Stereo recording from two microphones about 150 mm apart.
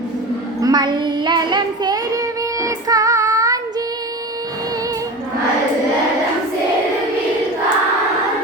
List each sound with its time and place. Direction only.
0.6 s child singing: 30° right (ahead or behind)